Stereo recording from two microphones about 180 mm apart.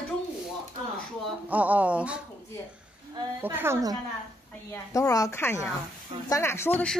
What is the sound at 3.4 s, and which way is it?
Speech, 10° right (ahead or behind).